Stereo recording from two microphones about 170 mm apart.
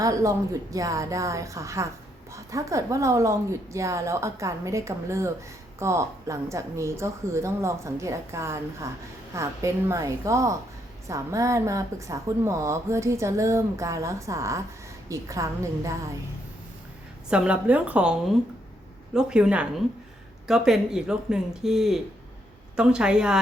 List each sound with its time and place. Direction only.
0.0 s a woman's voice: 20° right (ahead or behind)
17.2 s a woman's voice: 5° right (ahead or behind)